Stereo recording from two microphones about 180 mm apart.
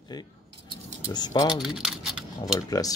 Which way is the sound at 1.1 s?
20° left (ahead or behind).